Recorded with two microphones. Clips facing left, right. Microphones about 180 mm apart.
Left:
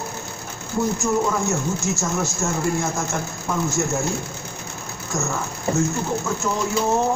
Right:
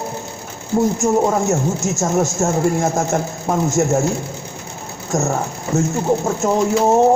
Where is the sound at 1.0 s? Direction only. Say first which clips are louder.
Right 5 dB; 45° right (ahead or behind).